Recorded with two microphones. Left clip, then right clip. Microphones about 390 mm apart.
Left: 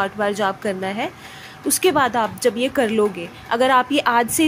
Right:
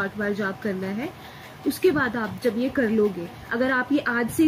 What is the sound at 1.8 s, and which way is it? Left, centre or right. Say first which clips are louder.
Speech: left 6 dB; centre.